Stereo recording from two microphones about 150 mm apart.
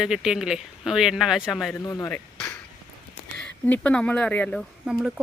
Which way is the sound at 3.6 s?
10° left (ahead or behind).